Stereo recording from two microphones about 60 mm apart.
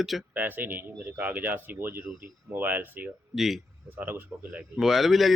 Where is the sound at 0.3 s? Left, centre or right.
Right.